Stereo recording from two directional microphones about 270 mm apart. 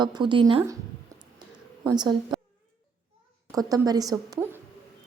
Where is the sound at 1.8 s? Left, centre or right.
Centre.